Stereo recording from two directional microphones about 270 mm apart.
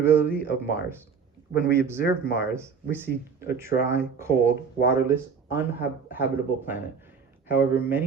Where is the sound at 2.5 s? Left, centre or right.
Centre.